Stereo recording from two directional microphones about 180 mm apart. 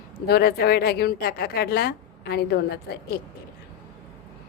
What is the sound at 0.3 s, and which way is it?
A woman's voice, 60° left (ahead or behind).